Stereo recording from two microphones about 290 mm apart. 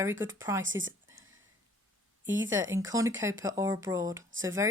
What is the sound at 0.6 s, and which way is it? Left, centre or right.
Speech, right.